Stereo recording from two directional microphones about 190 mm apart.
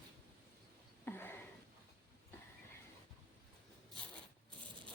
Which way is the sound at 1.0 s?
10° left (ahead or behind).